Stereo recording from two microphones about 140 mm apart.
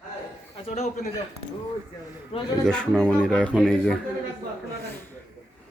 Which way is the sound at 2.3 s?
45° left (ahead or behind).